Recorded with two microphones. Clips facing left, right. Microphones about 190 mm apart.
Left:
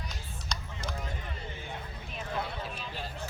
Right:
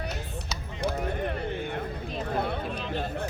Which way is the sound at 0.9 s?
60° right (ahead or behind).